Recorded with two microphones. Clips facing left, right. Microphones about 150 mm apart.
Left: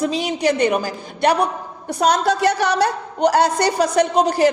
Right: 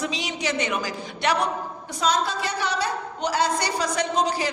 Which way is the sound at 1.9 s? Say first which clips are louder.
Left 7 dB; 65° left (ahead or behind).